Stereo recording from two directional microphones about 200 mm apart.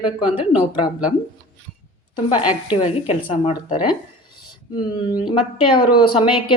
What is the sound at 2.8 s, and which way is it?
Speech, 30° left (ahead or behind).